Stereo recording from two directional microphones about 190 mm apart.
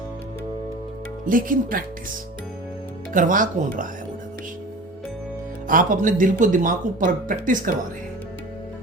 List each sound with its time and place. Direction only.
1.2 s speech: 45° right (ahead or behind)
3.1 s speech: 45° right (ahead or behind)
5.6 s speech: 45° right (ahead or behind)